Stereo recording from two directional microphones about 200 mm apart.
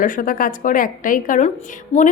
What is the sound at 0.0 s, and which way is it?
A woman's voice, 45° left (ahead or behind).